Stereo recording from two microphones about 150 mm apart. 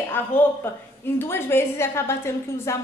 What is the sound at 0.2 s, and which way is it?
A woman's voice, 15° left (ahead or behind).